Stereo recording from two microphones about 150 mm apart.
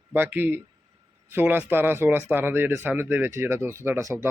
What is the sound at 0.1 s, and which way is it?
Speech, 15° right (ahead or behind).